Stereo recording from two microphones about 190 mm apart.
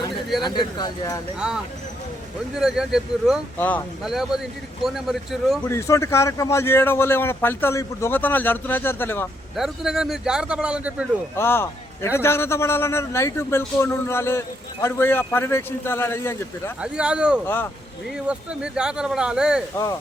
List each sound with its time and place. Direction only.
0.4 s speech: 20° left (ahead or behind)
1.4 s speech: 5° right (ahead or behind)
3.6 s a man's voice: 10° left (ahead or behind)
4.0 s speech: centre (ahead or behind)
5.6 s a man's voice: 15° left (ahead or behind)
9.6 s speech: centre (ahead or behind)
11.3 s a man's voice: 10° left (ahead or behind)
16.8 s speech: 5° right (ahead or behind)
17.4 s a man's voice: 10° left (ahead or behind)
18.3 s speech: 5° right (ahead or behind)
19.7 s a man's voice: 15° left (ahead or behind)